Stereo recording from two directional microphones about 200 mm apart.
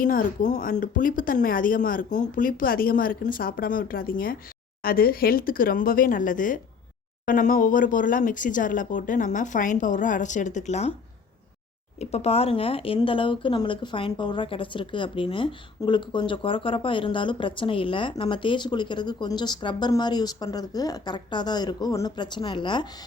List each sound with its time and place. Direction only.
0.0 s speech: 45° left (ahead or behind)
11.9 s speech: 30° left (ahead or behind)